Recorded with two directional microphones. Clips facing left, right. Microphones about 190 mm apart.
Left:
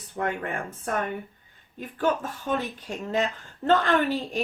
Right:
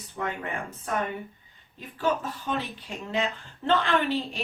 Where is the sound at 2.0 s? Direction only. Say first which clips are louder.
Left 1 dB; 50° left (ahead or behind).